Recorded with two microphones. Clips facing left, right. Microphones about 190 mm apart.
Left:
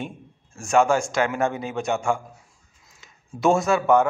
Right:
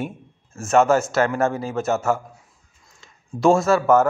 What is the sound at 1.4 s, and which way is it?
Speech, 20° left (ahead or behind).